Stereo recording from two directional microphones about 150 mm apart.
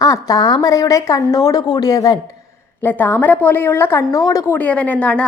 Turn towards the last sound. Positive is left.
turn(degrees=10)  # may be behind; listen again after turning